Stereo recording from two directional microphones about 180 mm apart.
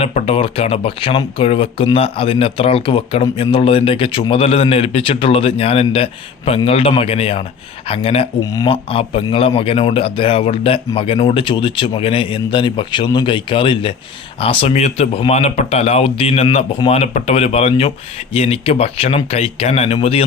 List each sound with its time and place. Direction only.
0.0 s speech: 35° left (ahead or behind)